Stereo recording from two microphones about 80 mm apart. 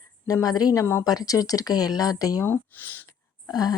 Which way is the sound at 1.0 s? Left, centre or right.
Left.